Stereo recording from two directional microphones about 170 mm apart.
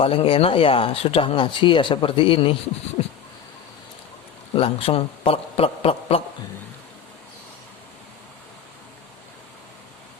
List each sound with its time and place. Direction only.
0.0 s speech: 35° left (ahead or behind)
3.0 s a sound: 40° left (ahead or behind)
4.5 s speech: 35° left (ahead or behind)